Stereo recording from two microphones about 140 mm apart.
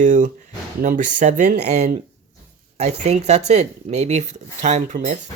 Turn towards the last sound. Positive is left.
turn(degrees=-60)  # may be behind; listen again after turning